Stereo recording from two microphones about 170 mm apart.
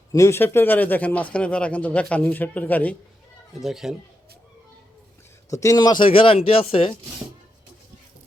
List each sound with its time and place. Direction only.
0.1 s speech: 15° left (ahead or behind)
3.6 s speech: centre (ahead or behind)
5.5 s speech: 20° left (ahead or behind); by 6.9 s 35° left (ahead or behind)